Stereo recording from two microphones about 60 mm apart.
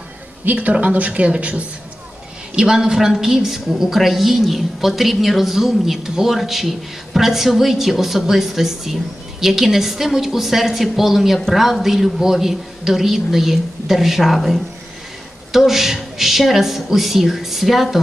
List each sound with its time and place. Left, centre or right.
0.5 s a woman's voice: right; by 17.8 s centre